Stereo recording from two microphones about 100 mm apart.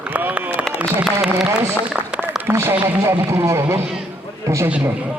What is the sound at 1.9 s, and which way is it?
A man's voice, 10° right (ahead or behind).